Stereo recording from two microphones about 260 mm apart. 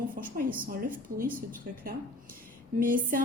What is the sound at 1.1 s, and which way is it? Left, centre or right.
Speech, right.